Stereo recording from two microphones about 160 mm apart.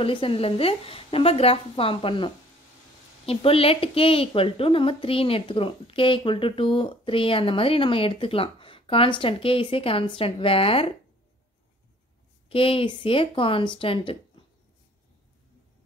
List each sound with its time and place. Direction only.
0.0 s a woman's voice: 35° left (ahead or behind)
12.4 s a woman's voice: 35° left (ahead or behind)